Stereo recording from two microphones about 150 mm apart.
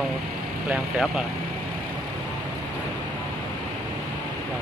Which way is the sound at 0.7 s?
5° right (ahead or behind).